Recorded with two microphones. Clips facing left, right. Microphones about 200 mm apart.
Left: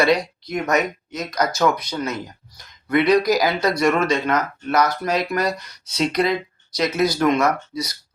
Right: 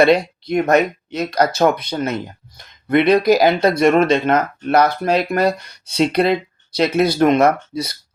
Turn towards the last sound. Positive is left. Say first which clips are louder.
# right 3 dB
turn(degrees=-55)  # may be behind; listen again after turning